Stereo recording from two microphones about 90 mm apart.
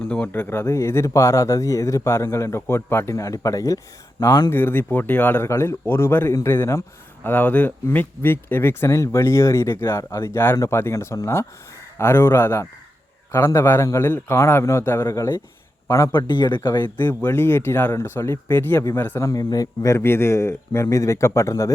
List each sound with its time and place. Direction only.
0.1 s speech: 20° left (ahead or behind); by 3.8 s 35° left (ahead or behind)
4.4 s speech: 25° left (ahead or behind)
5.5 s speech: 30° left (ahead or behind)
7.3 s speech: 20° left (ahead or behind); by 15.4 s 35° left (ahead or behind)
16.1 s speech: 55° left (ahead or behind)
16.8 s speech: 20° left (ahead or behind)
19.2 s speech: 40° left (ahead or behind)